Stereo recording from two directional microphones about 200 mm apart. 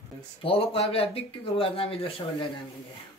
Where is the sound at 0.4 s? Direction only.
30° left (ahead or behind).